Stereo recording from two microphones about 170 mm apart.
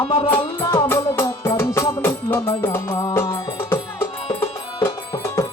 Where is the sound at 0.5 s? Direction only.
15° left (ahead or behind).